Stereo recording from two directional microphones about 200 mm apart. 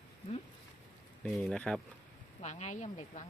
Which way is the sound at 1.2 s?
5° left (ahead or behind).